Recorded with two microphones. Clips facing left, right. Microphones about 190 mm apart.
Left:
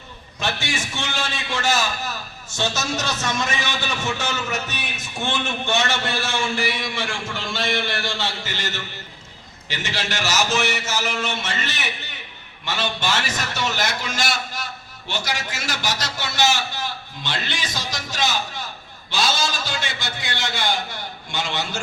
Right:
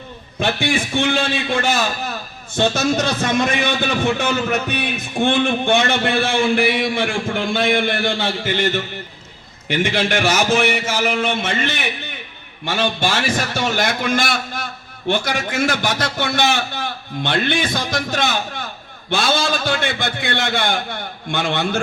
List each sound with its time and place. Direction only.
0.3 s a man's voice: 55° right (ahead or behind)